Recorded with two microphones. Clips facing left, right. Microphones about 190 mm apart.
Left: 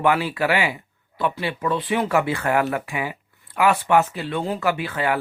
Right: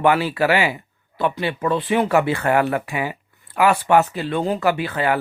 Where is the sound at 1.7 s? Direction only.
25° right (ahead or behind).